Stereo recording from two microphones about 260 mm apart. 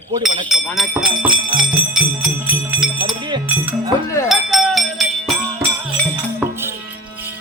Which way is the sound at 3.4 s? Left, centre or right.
Centre.